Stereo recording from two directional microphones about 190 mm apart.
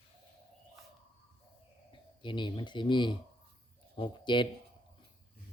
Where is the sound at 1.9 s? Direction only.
25° left (ahead or behind).